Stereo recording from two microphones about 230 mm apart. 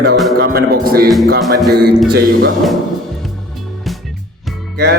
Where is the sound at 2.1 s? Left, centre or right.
Right.